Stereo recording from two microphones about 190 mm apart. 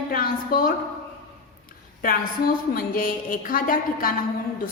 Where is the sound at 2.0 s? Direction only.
50° left (ahead or behind).